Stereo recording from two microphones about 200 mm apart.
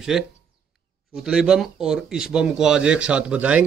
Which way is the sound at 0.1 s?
Centre (ahead or behind).